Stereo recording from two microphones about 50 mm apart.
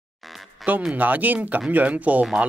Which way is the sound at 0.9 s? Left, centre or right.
Right.